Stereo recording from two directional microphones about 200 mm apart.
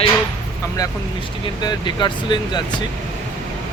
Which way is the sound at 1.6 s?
20° left (ahead or behind).